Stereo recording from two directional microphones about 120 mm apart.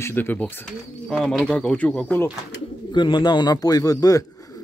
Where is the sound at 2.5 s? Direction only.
40° left (ahead or behind).